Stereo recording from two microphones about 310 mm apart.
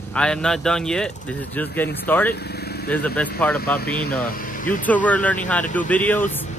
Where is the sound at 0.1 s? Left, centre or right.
Centre.